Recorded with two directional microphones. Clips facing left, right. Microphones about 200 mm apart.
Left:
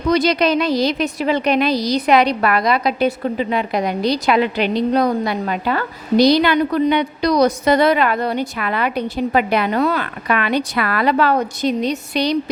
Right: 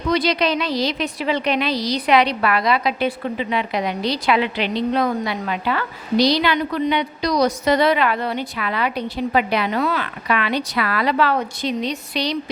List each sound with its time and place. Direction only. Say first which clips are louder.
0.1 s a woman's voice: left 4 dB; 45° left (ahead or behind)